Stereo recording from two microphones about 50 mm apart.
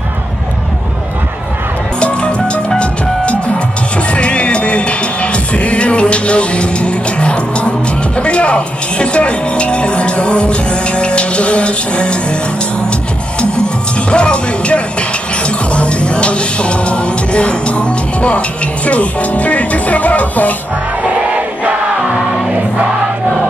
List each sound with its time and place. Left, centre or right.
2.0 s music: left
14.1 s speech: left
18.9 s music: left
21.0 s music: right